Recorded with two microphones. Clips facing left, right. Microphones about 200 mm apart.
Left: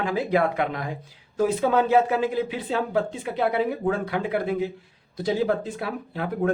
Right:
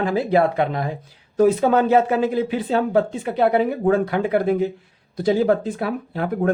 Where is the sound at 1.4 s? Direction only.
45° right (ahead or behind).